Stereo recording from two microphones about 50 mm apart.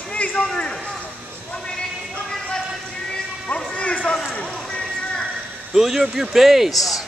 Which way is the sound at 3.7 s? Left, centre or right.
Left.